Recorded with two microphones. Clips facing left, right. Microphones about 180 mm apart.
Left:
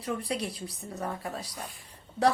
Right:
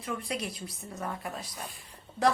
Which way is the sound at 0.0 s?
35° left (ahead or behind).